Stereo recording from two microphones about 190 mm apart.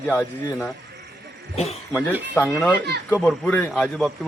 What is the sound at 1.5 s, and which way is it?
Speech, 35° left (ahead or behind).